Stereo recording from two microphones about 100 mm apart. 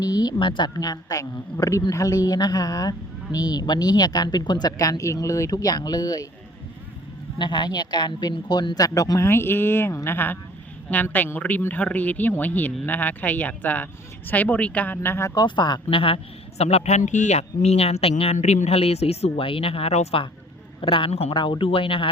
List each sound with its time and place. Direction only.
0.0 s speech: 40° left (ahead or behind)
7.3 s speech: 45° left (ahead or behind); by 15.3 s 25° left (ahead or behind)
15.4 s a woman's voice: 50° left (ahead or behind); by 20.2 s 90° left
20.8 s a man's voice: 65° left (ahead or behind); by 21.3 s 80° left
21.3 s a woman's voice: 55° left (ahead or behind)